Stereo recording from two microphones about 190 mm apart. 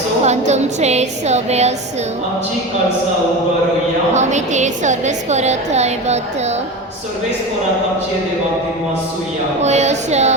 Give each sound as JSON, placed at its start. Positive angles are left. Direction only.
{"t": 0.3, "sound": "a woman's voice", "side_deg": -35}
{"t": 4.1, "sound": "a woman's voice", "side_deg": -40}
{"t": 9.6, "sound": "a woman's voice", "side_deg": -35}